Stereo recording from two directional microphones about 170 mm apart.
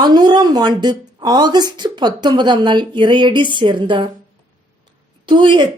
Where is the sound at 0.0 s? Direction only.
25° right (ahead or behind).